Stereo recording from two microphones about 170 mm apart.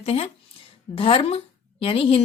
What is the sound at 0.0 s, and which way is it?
A woman's voice, 35° left (ahead or behind).